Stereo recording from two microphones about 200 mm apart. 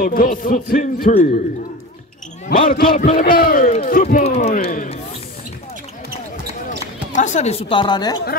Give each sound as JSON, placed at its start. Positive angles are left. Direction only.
{"t": 0.0, "sound": "a man's voice", "side_deg": 45}
{"t": 2.7, "sound": "a man's voice", "side_deg": 45}
{"t": 7.1, "sound": "a woman's voice", "side_deg": 40}